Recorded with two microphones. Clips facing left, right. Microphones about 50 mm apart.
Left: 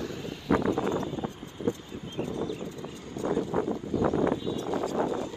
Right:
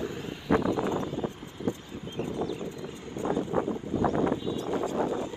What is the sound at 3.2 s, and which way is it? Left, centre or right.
Vehicle, right.